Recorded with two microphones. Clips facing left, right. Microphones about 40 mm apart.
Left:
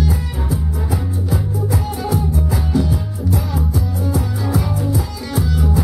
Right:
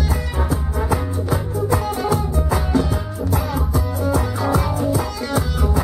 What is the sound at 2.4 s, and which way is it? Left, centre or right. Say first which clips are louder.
Music: right 2 dB; right.